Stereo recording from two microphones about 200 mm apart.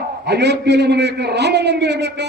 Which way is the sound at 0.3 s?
55° right (ahead or behind).